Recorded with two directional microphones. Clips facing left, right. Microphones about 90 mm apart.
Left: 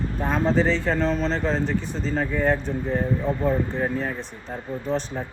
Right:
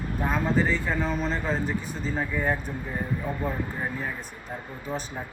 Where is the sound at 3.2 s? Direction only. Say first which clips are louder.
Left 7 dB; 25° left (ahead or behind).